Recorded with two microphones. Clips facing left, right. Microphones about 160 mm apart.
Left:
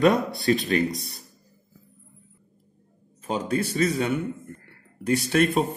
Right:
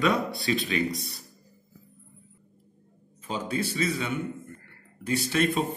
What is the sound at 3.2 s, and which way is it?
A man's voice, 50° left (ahead or behind).